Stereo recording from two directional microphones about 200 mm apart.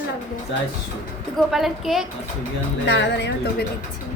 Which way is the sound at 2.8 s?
60° left (ahead or behind).